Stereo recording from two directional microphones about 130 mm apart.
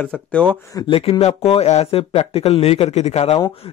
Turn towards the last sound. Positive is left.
turn(degrees=55)  # may be behind; listen again after turning